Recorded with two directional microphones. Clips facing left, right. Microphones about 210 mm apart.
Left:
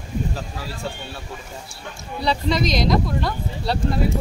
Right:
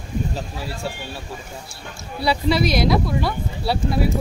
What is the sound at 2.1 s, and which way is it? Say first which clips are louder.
Speech: right 2 dB; 10° right (ahead or behind).